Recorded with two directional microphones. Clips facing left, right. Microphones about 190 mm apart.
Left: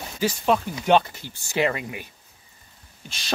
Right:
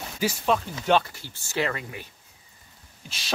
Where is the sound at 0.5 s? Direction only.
15° left (ahead or behind).